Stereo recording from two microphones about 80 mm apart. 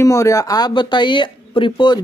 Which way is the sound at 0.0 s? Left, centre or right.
Left.